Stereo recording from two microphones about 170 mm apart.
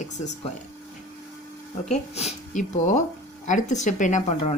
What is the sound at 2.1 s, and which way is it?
Speech, 40° left (ahead or behind).